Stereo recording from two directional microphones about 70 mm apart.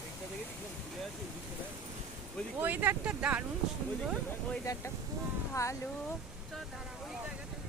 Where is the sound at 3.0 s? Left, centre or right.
Centre.